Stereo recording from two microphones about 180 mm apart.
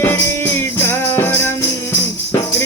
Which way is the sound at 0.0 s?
10° left (ahead or behind).